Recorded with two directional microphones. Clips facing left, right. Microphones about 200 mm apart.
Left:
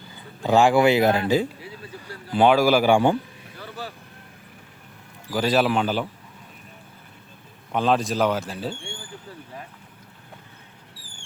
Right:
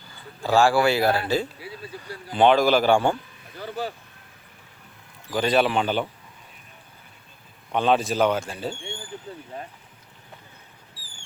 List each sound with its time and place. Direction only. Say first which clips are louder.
0.4 s speech: left 2 dB; 20° left (ahead or behind)
5.3 s speech: even; 5° left (ahead or behind)
7.7 s speech: even; centre (ahead or behind)